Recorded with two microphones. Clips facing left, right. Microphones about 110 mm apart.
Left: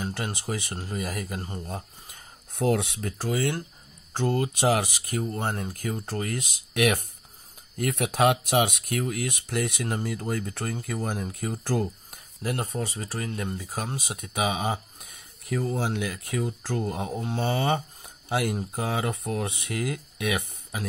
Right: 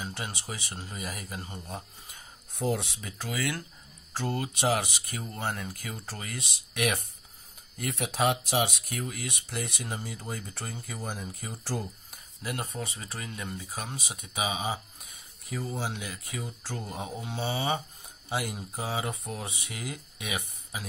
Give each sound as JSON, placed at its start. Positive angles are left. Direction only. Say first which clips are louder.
{"t": 0.0, "sound": "speech", "louder": "left 6 dB", "side_deg": 45}
{"t": 3.2, "sound": "speech", "louder": "left 5 dB", "side_deg": 30}
{"t": 4.6, "sound": "speech", "louder": "left 2 dB", "side_deg": 45}
{"t": 5.2, "sound": "speech", "louder": "left 3 dB", "side_deg": 35}
{"t": 12.7, "sound": "speech", "louder": "left 6 dB", "side_deg": 35}